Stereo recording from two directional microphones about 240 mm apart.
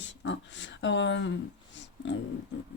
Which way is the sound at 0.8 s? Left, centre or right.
Left.